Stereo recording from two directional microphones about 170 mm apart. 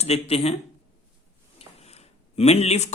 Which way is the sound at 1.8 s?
40° left (ahead or behind).